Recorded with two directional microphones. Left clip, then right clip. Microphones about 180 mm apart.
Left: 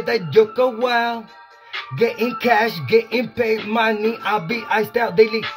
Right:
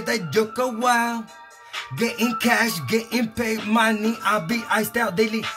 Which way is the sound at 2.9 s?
20° right (ahead or behind).